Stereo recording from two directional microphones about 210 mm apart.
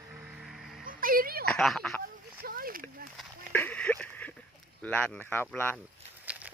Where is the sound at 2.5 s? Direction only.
45° right (ahead or behind).